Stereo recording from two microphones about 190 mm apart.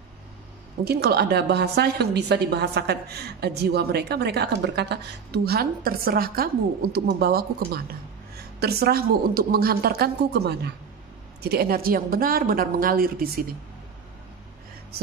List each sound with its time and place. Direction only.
0.8 s a woman's voice: 55° right (ahead or behind)